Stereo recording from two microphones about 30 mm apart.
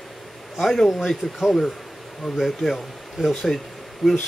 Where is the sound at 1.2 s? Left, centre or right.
Right.